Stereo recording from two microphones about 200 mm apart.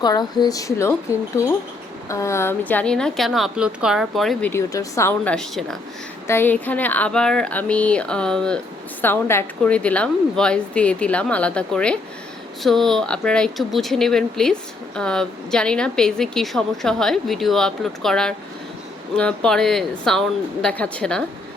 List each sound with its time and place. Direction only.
0.0 s speech: 20° left (ahead or behind); by 21.2 s 5° left (ahead or behind)